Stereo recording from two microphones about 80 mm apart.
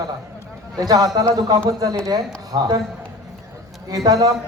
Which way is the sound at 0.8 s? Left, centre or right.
Right.